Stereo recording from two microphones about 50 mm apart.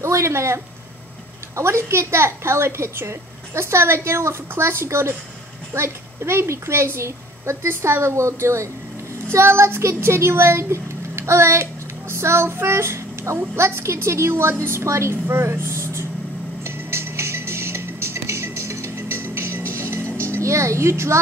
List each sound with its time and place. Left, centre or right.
0.0 s speech: right
1.6 s a woman's voice: right
9.3 s a woman's voice: right
16.6 s music: right